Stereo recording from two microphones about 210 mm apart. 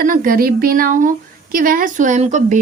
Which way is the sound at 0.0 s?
40° right (ahead or behind).